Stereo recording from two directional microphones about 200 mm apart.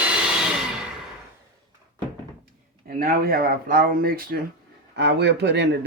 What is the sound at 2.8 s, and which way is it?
Speech, 45° right (ahead or behind).